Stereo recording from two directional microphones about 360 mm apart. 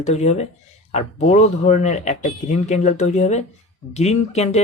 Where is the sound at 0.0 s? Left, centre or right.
Centre.